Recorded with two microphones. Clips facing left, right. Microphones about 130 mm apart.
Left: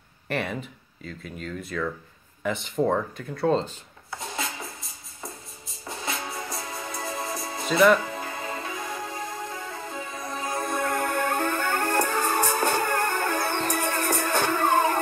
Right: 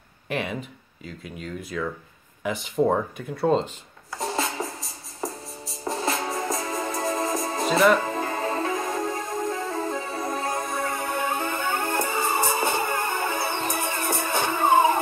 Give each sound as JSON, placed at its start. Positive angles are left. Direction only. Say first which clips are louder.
{"t": 0.3, "sound": "speech", "louder": "even", "side_deg": 0}
{"t": 4.2, "sound": "music", "louder": "right 7 dB", "side_deg": -40}
{"t": 10.6, "sound": "music", "louder": "left 1 dB", "side_deg": 0}
{"t": 11.1, "sound": "music", "louder": "left 1 dB", "side_deg": -10}